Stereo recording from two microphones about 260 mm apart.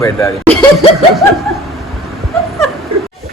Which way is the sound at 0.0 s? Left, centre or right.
Centre.